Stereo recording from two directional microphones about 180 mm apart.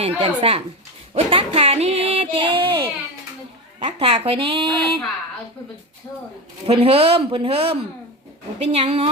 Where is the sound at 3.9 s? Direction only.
30° right (ahead or behind).